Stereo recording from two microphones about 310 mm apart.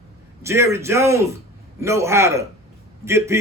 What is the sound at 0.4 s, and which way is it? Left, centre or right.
A man's voice, centre.